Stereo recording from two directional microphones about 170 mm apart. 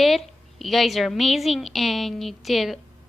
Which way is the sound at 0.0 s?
Centre (ahead or behind).